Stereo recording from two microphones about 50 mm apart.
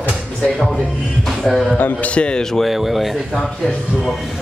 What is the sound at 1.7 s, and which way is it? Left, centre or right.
Speech, left.